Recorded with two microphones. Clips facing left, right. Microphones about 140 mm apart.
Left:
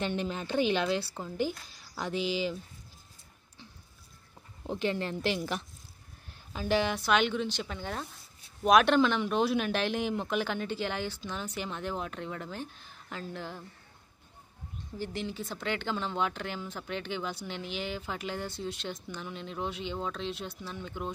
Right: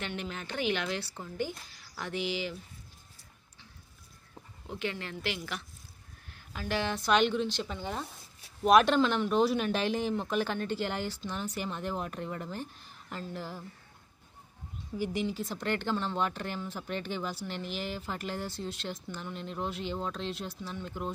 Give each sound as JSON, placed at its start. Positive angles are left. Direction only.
{"t": 0.0, "sound": "a woman's voice", "side_deg": 30}
{"t": 4.6, "sound": "a woman's voice", "side_deg": 35}
{"t": 6.5, "sound": "speech", "side_deg": 15}
{"t": 14.9, "sound": "speech", "side_deg": -5}